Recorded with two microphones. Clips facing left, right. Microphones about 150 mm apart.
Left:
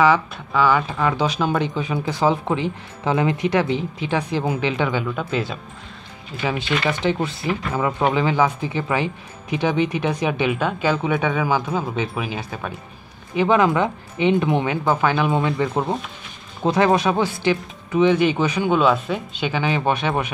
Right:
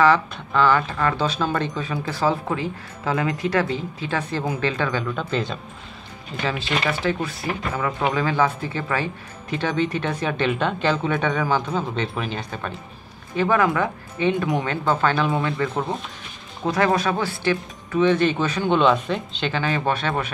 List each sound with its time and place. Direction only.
0.0 s speech: 10° left (ahead or behind)
6.4 s speech: 20° left (ahead or behind)
13.4 s speech: 20° left (ahead or behind)